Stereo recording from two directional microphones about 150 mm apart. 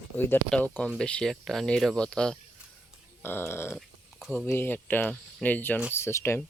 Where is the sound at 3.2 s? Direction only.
15° left (ahead or behind).